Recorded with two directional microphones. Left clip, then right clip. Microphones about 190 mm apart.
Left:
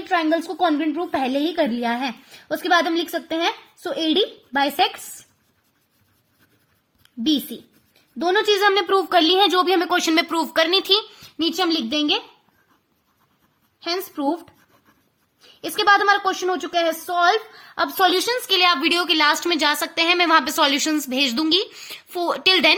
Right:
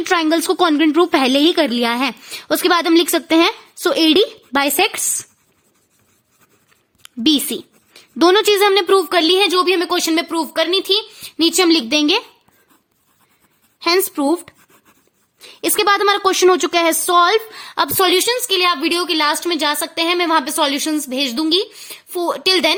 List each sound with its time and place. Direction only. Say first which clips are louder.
0.1 s a woman's voice: right 4 dB; 55° right (ahead or behind)
7.0 s a sound: right 6 dB; 55° right (ahead or behind)
7.9 s a woman's voice: right 7 dB; 55° right (ahead or behind); by 12.2 s 40° right (ahead or behind)
13.8 s a woman's voice: right 8 dB; 45° right (ahead or behind)
18.2 s a woman's voice: right 2 dB; 25° right (ahead or behind)